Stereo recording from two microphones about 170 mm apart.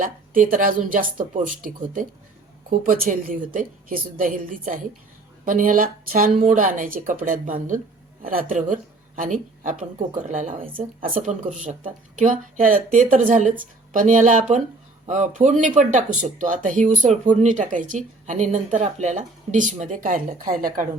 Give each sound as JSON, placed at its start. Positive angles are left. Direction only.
{"t": 0.0, "sound": "a woman's voice", "side_deg": -55}